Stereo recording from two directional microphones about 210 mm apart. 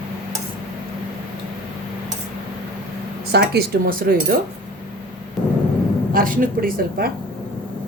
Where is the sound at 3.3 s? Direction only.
50° right (ahead or behind).